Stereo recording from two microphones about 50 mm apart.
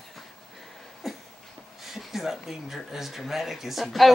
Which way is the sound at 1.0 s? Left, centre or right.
Centre.